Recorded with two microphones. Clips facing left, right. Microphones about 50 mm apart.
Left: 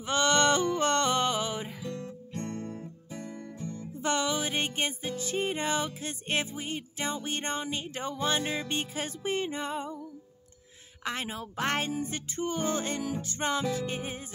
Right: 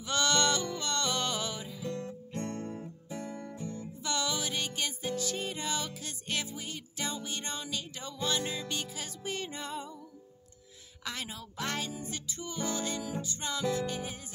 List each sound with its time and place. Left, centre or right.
0.0 s music: left
1.2 s music: left
1.6 s music: left
2.4 s guitar: centre
2.7 s music: centre
3.6 s music: centre
4.0 s music: left
5.0 s music: left
5.5 s music: left
11.1 s music: left